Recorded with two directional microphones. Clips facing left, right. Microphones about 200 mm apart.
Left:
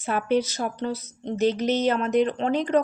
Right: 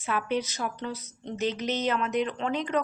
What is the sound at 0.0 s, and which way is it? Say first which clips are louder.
A woman's voice: left 6 dB; 40° left (ahead or behind).